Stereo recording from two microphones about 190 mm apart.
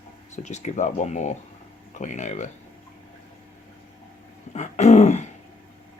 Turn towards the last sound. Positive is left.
turn(degrees=35)  # may be behind; listen again after turning